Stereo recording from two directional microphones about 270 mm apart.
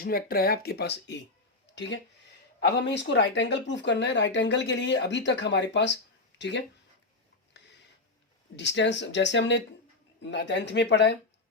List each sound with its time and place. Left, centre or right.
0.0 s speech: left
6.3 s a sound: left
8.5 s speech: left